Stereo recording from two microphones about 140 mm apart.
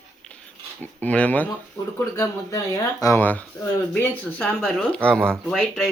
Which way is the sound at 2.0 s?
25° left (ahead or behind).